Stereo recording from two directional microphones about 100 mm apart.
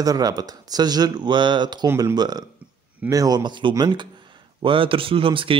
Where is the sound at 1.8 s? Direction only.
35° right (ahead or behind).